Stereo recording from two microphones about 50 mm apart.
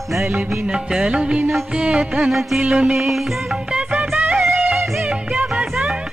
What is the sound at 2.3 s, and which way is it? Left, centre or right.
Music, centre.